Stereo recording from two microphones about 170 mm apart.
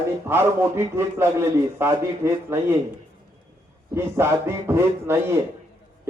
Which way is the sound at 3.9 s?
15° right (ahead or behind).